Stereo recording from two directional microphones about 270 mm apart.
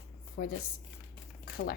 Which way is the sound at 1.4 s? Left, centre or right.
Left.